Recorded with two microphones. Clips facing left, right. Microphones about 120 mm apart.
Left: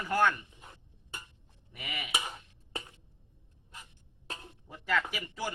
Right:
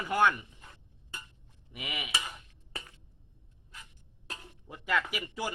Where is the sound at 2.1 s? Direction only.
20° left (ahead or behind).